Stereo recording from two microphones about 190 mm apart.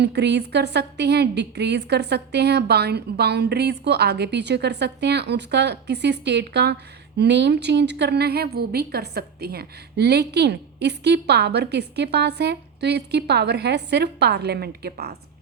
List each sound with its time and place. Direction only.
0.0 s a woman's voice: 65° right (ahead or behind)